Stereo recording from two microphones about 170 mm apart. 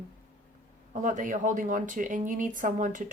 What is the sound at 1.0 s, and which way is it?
A woman's voice, 50° right (ahead or behind).